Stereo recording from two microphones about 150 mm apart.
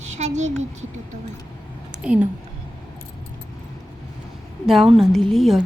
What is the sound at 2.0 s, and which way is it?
Speech, 5° right (ahead or behind).